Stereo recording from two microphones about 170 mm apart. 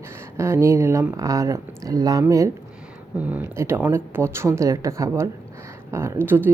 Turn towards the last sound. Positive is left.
turn(degrees=-10)  # may be behind; listen again after turning